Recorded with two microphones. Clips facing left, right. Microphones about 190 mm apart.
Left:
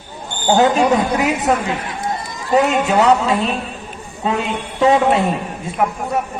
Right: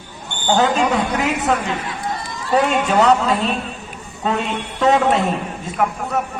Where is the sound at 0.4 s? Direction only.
20° left (ahead or behind).